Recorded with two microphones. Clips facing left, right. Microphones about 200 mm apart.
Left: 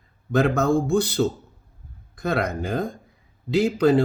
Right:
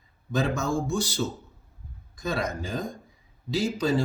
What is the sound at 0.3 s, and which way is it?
Speech, 60° left (ahead or behind).